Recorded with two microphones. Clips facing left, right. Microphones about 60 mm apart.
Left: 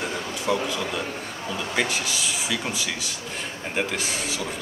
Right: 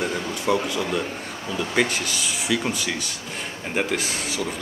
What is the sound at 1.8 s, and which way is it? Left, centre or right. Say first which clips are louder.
Speech: right 3 dB; centre.